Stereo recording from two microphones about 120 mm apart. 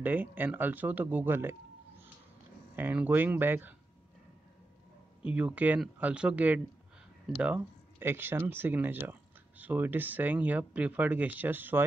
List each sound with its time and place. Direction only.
0.0 s speech: 15° right (ahead or behind)
5.2 s speech: 10° right (ahead or behind)